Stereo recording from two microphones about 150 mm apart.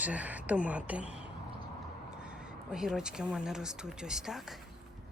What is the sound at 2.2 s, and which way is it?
Speech, 5° right (ahead or behind).